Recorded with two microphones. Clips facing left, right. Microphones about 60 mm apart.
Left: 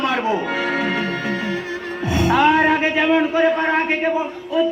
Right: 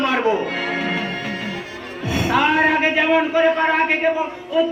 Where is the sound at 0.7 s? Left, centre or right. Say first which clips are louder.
Left 2 dB; centre.